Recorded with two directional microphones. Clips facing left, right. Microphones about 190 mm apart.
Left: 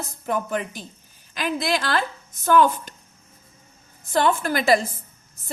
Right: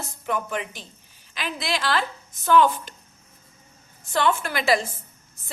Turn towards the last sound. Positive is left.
turn(degrees=40)  # may be behind; listen again after turning